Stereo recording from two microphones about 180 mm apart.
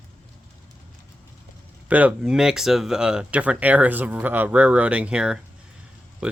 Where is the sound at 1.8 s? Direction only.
10° right (ahead or behind).